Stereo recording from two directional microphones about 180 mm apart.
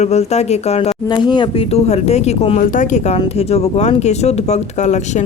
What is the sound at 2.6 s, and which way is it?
Speech, 45° left (ahead or behind).